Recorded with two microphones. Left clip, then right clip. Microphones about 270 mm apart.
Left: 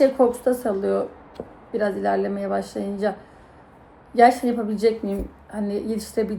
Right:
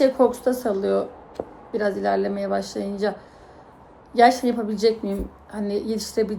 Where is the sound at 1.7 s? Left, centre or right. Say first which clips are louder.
Even; centre.